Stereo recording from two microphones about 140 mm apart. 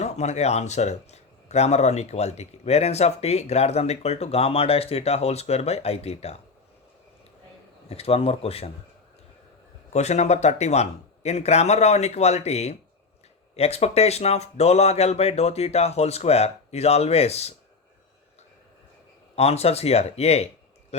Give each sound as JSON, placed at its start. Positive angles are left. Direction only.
{"t": 0.0, "sound": "speech", "side_deg": 55}
{"t": 7.9, "sound": "speech", "side_deg": 45}
{"t": 9.9, "sound": "speech", "side_deg": 50}
{"t": 19.4, "sound": "speech", "side_deg": 45}